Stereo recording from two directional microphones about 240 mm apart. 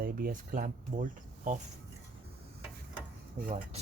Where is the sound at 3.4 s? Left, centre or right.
Right.